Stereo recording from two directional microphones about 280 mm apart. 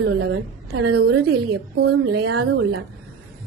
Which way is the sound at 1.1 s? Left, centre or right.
Right.